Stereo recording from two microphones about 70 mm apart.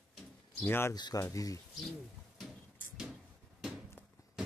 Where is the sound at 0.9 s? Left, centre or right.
Left.